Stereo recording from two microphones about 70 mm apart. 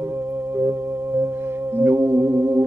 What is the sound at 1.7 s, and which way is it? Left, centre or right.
Music, right.